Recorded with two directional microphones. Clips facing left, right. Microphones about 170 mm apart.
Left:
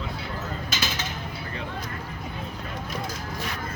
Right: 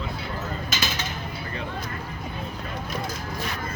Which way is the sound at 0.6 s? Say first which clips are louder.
Right 1 dB; 50° right (ahead or behind).